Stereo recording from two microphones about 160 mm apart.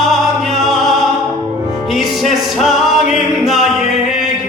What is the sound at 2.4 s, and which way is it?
A capella, centre (ahead or behind).